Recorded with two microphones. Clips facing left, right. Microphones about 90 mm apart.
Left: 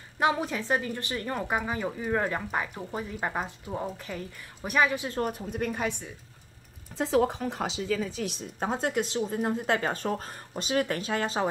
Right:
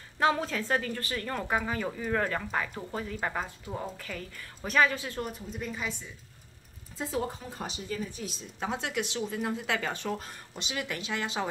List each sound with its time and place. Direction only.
0.2 s a woman's voice: 15° left (ahead or behind)
5.3 s a woman's voice: 55° left (ahead or behind)
7.0 s a woman's voice: 70° left (ahead or behind)
8.5 s a woman's voice: 40° left (ahead or behind)